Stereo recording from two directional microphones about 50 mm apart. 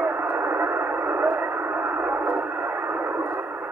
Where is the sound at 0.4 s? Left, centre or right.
Right.